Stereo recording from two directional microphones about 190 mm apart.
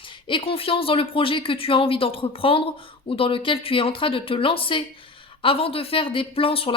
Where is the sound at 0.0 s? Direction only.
25° left (ahead or behind).